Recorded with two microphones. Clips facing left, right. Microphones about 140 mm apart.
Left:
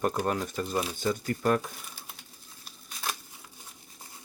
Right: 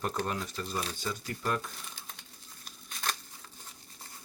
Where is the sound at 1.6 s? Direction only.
10° left (ahead or behind).